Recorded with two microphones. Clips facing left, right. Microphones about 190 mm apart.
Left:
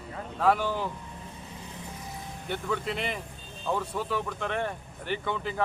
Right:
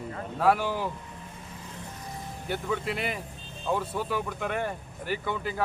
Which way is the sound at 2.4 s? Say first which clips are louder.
Right 1 dB; 5° right (ahead or behind).